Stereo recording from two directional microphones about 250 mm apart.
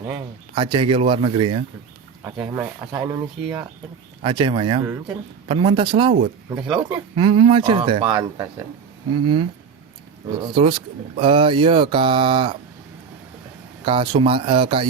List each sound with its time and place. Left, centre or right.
0.0 s speech: centre
2.2 s speech: centre
10.2 s speech: centre
13.8 s speech: right